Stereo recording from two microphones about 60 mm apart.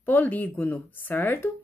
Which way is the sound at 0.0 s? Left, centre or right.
Left.